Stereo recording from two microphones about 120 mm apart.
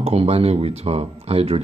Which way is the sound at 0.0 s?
60° right (ahead or behind).